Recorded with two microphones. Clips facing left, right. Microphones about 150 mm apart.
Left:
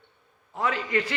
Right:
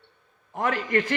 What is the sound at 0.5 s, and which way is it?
Speech, 50° right (ahead or behind).